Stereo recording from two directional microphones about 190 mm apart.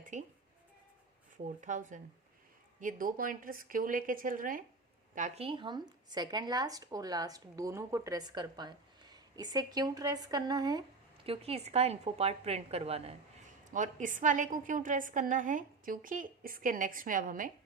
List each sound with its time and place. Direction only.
0.0 s speech: 40° right (ahead or behind)
1.5 s a woman's voice: 40° right (ahead or behind)
5.5 s a woman's voice: 25° right (ahead or behind)
13.7 s a woman's voice: 40° right (ahead or behind)